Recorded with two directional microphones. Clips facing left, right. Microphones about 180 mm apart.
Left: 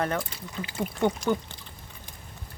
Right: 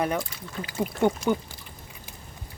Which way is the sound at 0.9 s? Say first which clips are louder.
Right 2 dB; 10° right (ahead or behind).